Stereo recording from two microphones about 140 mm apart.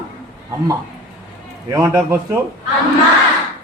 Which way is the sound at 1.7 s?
20° right (ahead or behind).